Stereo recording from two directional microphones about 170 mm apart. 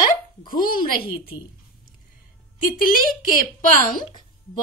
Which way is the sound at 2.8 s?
55° left (ahead or behind).